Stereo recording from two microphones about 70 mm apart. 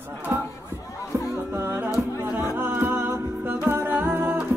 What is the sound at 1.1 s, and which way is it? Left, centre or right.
Music, right.